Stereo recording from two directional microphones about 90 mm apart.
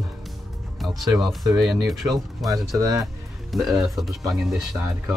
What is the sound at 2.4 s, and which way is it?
Speech, 40° right (ahead or behind).